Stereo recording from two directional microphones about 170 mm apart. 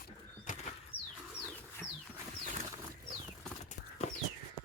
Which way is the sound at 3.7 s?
45° left (ahead or behind).